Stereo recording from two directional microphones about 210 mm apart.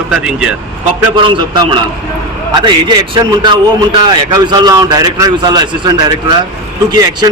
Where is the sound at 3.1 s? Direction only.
20° right (ahead or behind).